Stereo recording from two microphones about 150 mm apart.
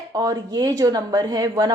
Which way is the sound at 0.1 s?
25° right (ahead or behind).